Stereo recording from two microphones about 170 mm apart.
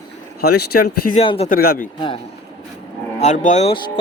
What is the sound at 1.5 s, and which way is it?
Speech, 55° left (ahead or behind).